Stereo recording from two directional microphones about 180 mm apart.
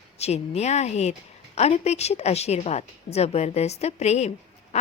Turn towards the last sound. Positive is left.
turn(degrees=40)  # may be behind; listen again after turning